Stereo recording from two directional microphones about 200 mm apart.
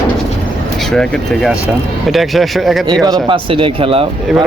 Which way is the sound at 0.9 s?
Centre (ahead or behind).